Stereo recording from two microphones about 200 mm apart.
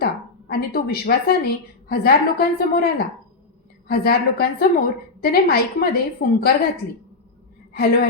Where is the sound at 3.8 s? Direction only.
50° left (ahead or behind).